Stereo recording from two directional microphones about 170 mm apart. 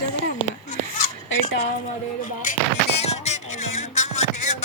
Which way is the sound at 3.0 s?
40° left (ahead or behind).